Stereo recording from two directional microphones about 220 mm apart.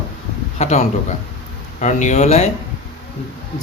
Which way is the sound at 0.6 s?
30° left (ahead or behind).